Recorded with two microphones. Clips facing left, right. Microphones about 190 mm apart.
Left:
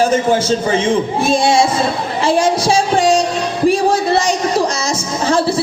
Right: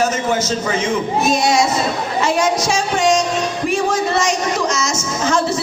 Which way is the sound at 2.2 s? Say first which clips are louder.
Left 3 dB; 30° left (ahead or behind).